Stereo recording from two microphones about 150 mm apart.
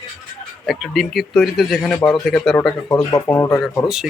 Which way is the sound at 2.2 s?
5° left (ahead or behind).